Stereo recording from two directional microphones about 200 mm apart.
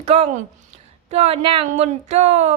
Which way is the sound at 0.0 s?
30° right (ahead or behind).